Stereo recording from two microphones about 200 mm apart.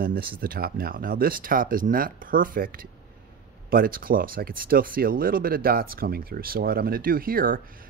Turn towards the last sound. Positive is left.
turn(degrees=-45)  # may be behind; listen again after turning